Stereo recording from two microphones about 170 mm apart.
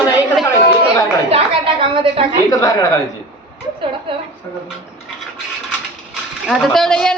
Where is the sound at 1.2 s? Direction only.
35° right (ahead or behind).